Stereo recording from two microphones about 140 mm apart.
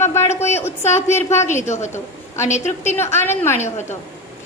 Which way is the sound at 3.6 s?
55° left (ahead or behind).